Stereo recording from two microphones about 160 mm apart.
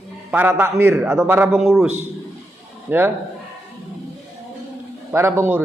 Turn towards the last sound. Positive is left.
turn(degrees=-15)  # may be behind; listen again after turning